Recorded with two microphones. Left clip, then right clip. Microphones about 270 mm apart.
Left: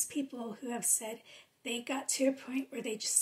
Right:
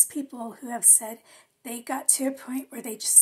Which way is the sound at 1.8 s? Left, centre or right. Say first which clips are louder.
Right 5 dB; centre.